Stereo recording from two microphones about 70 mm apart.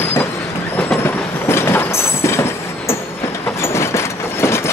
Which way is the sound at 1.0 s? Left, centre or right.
Left.